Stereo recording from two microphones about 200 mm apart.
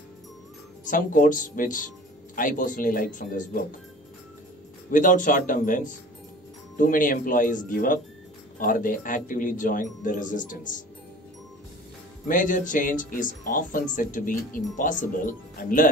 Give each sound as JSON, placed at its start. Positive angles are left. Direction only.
{"t": 0.8, "sound": "speech", "side_deg": 40}
{"t": 4.9, "sound": "speech", "side_deg": 40}
{"t": 12.3, "sound": "speech", "side_deg": 40}